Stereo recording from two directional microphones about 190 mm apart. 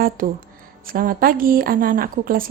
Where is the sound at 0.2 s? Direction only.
45° right (ahead or behind).